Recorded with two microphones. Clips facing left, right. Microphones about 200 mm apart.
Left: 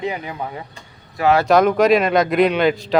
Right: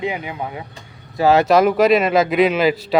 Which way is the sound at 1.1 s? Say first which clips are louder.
Right 2 dB; 25° right (ahead or behind).